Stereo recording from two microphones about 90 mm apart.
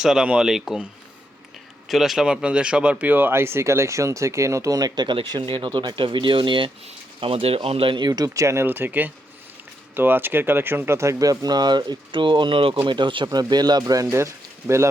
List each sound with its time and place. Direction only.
0.0 s speech: 5° right (ahead or behind)
1.9 s speech: centre (ahead or behind); by 6.7 s 70° right (ahead or behind)
7.2 s speech: 90° right; by 8.6 s 35° right (ahead or behind)
8.6 s speech: 20° right (ahead or behind); by 12.7 s 75° right (ahead or behind)
12.9 s speech: 65° right (ahead or behind); by 14.8 s 30° right (ahead or behind)